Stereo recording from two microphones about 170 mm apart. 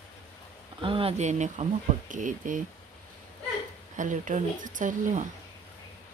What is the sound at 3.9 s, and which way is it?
Speech, 50° right (ahead or behind).